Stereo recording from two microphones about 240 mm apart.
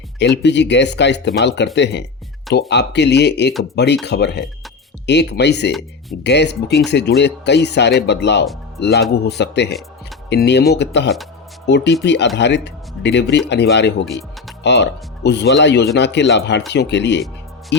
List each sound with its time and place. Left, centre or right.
0.2 s speech: left